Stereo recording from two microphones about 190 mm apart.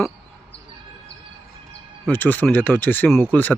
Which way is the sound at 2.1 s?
10° left (ahead or behind).